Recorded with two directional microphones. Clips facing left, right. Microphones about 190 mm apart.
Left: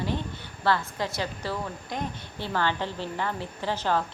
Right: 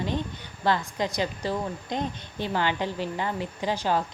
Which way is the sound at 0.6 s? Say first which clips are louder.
Right 1 dB; 15° right (ahead or behind).